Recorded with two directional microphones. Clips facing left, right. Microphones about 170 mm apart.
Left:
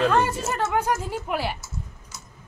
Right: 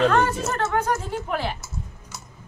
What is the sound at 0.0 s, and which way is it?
A woman's voice, 10° left (ahead or behind).